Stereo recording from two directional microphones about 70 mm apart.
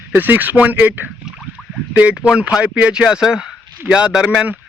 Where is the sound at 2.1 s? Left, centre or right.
Centre.